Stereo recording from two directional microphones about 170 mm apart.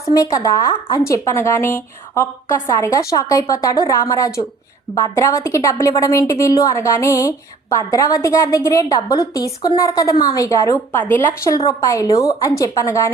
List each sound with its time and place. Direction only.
0.1 s a woman's voice: 20° left (ahead or behind)